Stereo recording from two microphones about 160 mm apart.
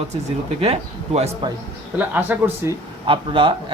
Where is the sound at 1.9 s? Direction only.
10° right (ahead or behind).